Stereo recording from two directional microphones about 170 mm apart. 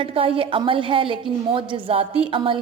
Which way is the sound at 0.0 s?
30° right (ahead or behind).